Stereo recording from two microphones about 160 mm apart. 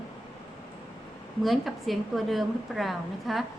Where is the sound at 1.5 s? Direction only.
Centre (ahead or behind).